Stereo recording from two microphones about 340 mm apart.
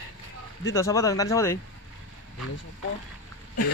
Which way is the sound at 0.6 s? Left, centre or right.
Centre.